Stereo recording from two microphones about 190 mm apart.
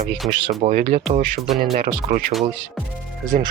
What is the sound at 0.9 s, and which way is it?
Speech, 30° right (ahead or behind).